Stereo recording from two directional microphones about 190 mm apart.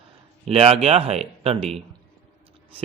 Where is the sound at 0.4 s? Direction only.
30° right (ahead or behind).